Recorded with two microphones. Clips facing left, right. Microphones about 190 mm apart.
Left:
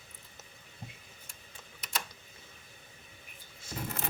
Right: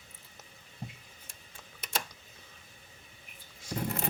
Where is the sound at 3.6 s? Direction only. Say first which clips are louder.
Right 5 dB; 15° right (ahead or behind).